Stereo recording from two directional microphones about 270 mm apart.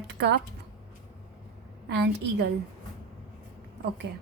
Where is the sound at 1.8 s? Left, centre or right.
Right.